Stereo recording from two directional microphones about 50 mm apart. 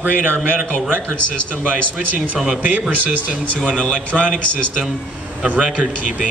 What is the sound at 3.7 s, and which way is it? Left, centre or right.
Speech, centre.